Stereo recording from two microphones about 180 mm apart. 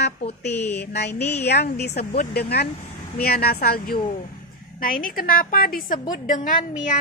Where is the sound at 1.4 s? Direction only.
65° left (ahead or behind).